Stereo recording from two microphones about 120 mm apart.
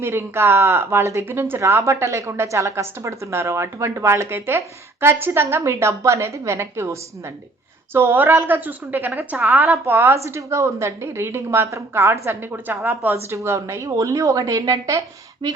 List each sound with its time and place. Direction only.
0.0 s a woman's voice: 20° right (ahead or behind); by 15.6 s 35° right (ahead or behind)